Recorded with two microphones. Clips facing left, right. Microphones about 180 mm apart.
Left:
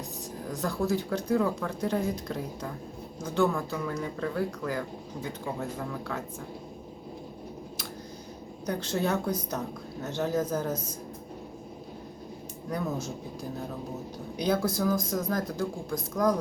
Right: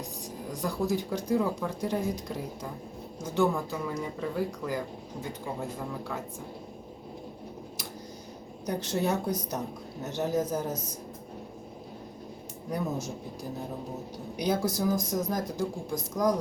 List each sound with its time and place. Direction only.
0.4 s speech: 15° right (ahead or behind)
8.6 s speech: 15° right (ahead or behind)
14.3 s speech: 15° right (ahead or behind)